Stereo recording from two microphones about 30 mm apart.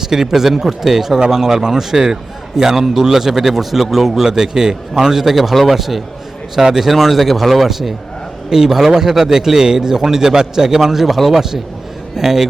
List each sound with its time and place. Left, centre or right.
0.0 s a man's voice: centre
4.3 s a man's voice: right